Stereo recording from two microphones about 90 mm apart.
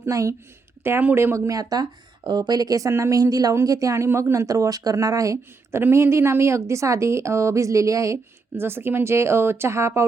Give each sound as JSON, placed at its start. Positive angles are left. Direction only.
{"t": 0.0, "sound": "a woman's voice", "side_deg": -35}